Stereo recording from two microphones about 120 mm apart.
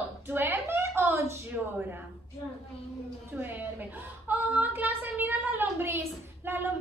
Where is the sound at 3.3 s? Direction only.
15° right (ahead or behind).